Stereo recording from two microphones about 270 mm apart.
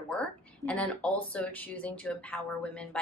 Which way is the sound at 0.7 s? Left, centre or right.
Centre.